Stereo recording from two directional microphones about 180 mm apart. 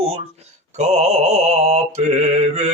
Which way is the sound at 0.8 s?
40° right (ahead or behind).